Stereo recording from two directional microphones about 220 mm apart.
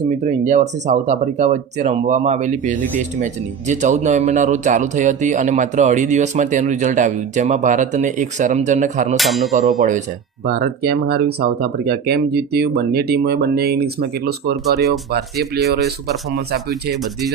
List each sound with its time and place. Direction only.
0.3 s speech: 35° right (ahead or behind)
9.1 s speech: centre (ahead or behind)
9.6 s speech: 35° right (ahead or behind)
10.5 s speech: 45° right (ahead or behind)